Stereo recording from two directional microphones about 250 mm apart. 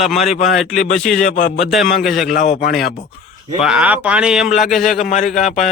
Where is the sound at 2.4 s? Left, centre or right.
Left.